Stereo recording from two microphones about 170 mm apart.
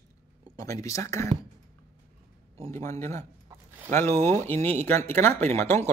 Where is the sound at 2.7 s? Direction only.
15° left (ahead or behind).